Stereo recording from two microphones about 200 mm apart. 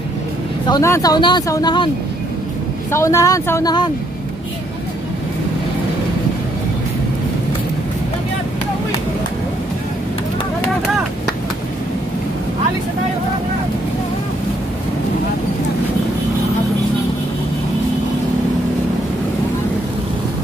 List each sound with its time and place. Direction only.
0.7 s speech: 15° left (ahead or behind)
2.9 s speech: 15° left (ahead or behind)